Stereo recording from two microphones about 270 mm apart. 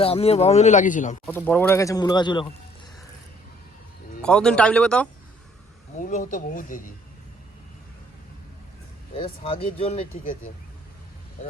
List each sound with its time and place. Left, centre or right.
0.0 s speech: left
1.2 s speech: centre
4.2 s speech: centre
6.0 s speech: left
9.1 s speech: centre